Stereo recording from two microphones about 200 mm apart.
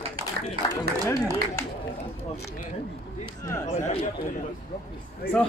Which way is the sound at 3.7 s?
35° left (ahead or behind).